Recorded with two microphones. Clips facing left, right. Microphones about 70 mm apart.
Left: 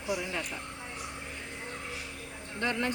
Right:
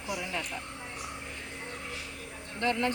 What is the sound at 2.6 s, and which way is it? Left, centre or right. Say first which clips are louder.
Speech: right 2 dB; left.